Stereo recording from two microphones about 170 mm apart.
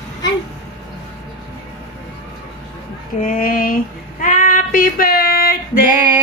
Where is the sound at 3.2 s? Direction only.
55° left (ahead or behind).